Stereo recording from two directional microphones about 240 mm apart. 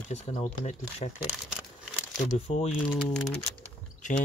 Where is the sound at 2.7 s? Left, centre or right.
Centre.